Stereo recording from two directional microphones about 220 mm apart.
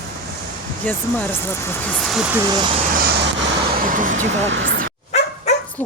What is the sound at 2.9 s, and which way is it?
Vehicle, 45° right (ahead or behind).